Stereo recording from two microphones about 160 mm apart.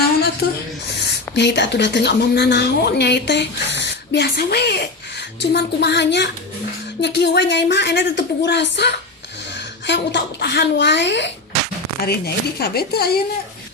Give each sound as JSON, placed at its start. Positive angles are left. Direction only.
{"t": 0.9, "sound": "speech", "side_deg": 90}
{"t": 11.9, "sound": "speech", "side_deg": 75}